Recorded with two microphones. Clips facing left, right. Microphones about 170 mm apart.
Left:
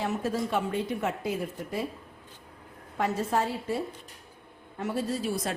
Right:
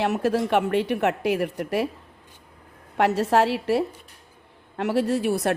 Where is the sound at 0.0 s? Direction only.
70° right (ahead or behind).